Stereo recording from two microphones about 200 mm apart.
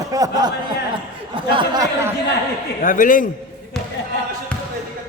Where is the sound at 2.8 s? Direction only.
40° left (ahead or behind).